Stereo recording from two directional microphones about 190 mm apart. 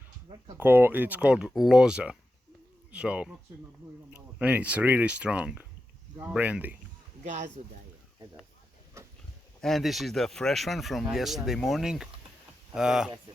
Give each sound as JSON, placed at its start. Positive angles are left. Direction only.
{"t": 0.5, "sound": "speech", "side_deg": -10}
{"t": 7.3, "sound": "speech", "side_deg": -40}
{"t": 9.0, "sound": "dog", "side_deg": -15}
{"t": 9.6, "sound": "speech", "side_deg": 0}